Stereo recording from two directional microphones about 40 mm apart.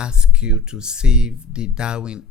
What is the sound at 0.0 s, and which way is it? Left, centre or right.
Speech, right.